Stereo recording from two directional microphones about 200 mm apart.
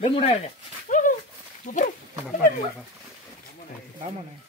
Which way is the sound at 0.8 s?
40° left (ahead or behind).